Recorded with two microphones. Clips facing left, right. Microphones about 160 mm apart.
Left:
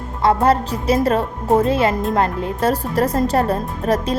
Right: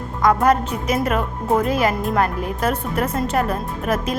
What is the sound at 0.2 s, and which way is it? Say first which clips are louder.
Speech: left 1 dB; 30° left (ahead or behind).